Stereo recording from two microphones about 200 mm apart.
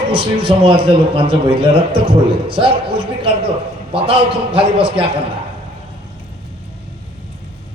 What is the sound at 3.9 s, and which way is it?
Speech, 25° right (ahead or behind).